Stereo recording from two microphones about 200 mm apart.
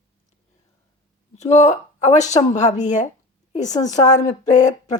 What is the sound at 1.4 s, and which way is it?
Speech, 35° left (ahead or behind).